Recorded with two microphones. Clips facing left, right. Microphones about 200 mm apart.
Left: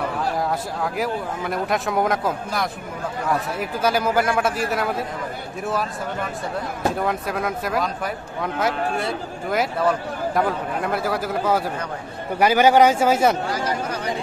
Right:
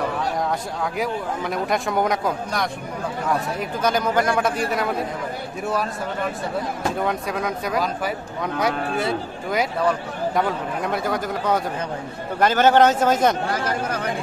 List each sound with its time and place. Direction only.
0.2 s speech: 5° left (ahead or behind)
7.0 s speech: centre (ahead or behind)
13.7 s speech: 55° right (ahead or behind)